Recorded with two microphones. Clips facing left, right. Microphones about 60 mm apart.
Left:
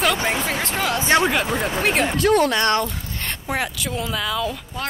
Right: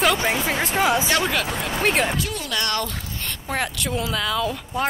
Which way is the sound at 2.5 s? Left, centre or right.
Left.